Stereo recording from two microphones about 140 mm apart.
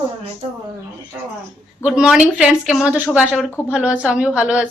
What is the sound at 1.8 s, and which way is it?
Speech, 5° right (ahead or behind).